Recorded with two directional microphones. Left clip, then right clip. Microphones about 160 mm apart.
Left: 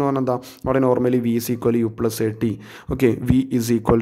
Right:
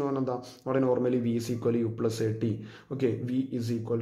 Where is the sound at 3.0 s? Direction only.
40° left (ahead or behind).